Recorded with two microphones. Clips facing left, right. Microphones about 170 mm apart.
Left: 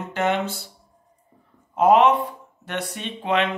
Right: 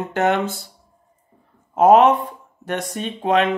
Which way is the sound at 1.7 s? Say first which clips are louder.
Right 3 dB; 45° right (ahead or behind).